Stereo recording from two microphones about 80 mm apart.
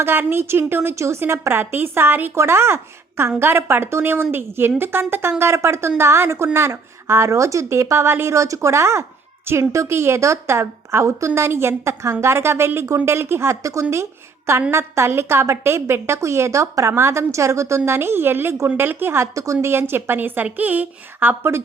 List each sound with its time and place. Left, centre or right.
0.0 s a woman's voice: right
19.6 s a woman's voice: right